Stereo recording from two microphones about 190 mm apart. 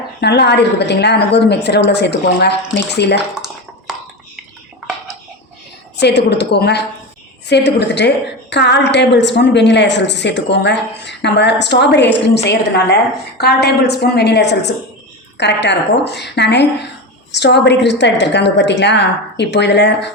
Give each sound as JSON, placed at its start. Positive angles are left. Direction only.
{"t": 0.2, "sound": "a woman's voice", "side_deg": 60}
{"t": 3.9, "sound": "a sound", "side_deg": 0}
{"t": 6.0, "sound": "a woman's voice", "side_deg": 60}